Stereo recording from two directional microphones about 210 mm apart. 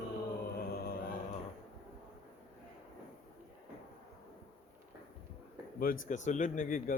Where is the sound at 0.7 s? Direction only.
45° left (ahead or behind).